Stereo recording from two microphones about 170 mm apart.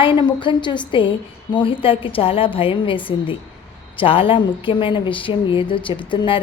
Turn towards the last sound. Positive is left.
turn(degrees=30)  # may be behind; listen again after turning